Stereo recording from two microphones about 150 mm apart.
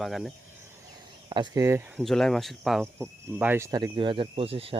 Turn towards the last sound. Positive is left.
turn(degrees=-40)  # may be behind; listen again after turning